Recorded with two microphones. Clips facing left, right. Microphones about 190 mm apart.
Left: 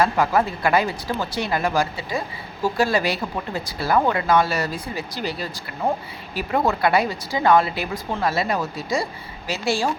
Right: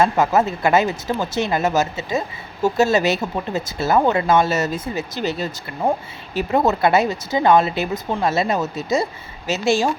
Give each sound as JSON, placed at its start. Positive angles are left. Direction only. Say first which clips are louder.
{"t": 0.0, "sound": "speech", "louder": "right 3 dB", "side_deg": -25}